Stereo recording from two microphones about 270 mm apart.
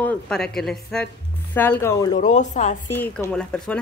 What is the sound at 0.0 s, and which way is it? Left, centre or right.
Speech, centre.